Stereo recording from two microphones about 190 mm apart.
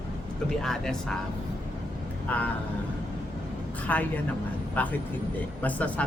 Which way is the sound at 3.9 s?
10° left (ahead or behind).